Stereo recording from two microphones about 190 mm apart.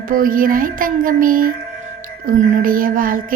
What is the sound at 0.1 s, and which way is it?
A woman's voice, 50° right (ahead or behind).